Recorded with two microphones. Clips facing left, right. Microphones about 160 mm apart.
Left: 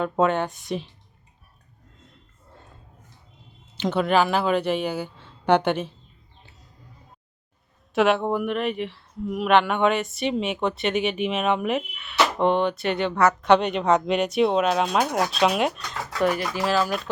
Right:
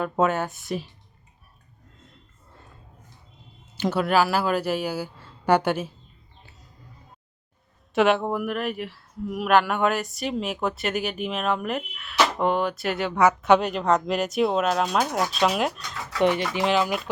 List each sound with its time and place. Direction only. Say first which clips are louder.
0.0 s speech: left 1 dB; 5° right (ahead or behind)
3.8 s speech: left 1 dB; 5° right (ahead or behind)
7.9 s speech: even; centre (ahead or behind)
16.2 s speech: right 2 dB; 25° right (ahead or behind)